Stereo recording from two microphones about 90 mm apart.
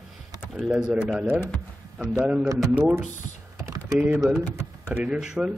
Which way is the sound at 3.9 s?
20° right (ahead or behind).